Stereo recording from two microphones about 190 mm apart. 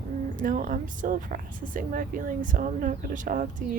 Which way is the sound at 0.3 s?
45° right (ahead or behind).